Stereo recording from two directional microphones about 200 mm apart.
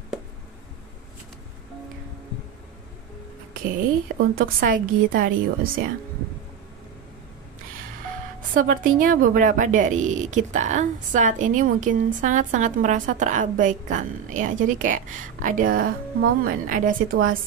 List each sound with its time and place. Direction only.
4.2 s a woman's voice: 45° right (ahead or behind)
8.5 s a woman's voice: 45° right (ahead or behind)